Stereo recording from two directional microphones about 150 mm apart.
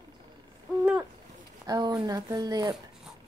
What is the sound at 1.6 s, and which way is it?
Speech, 25° right (ahead or behind).